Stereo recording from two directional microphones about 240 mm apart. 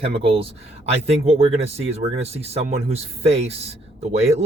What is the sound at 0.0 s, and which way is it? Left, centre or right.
Speech, right.